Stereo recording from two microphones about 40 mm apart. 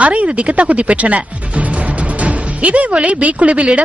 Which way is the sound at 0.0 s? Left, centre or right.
Right.